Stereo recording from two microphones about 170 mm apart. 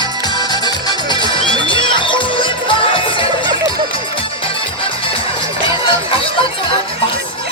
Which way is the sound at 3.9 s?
30° left (ahead or behind).